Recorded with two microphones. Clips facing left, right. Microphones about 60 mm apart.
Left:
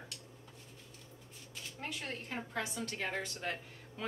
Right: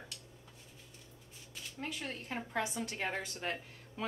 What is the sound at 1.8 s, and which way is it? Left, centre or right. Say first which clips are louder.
Speech: right 1 dB; centre.